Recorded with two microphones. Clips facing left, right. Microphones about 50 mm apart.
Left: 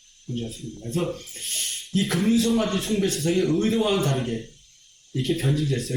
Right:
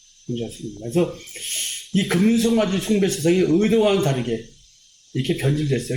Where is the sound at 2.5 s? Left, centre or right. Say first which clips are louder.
Right 4 dB; right.